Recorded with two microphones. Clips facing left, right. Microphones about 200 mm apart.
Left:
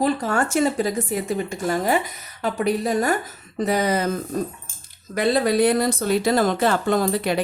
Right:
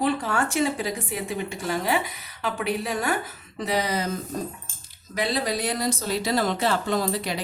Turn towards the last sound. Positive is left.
turn(degrees=55)  # may be behind; listen again after turning